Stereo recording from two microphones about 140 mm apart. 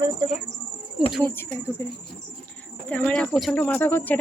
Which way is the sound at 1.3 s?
15° left (ahead or behind).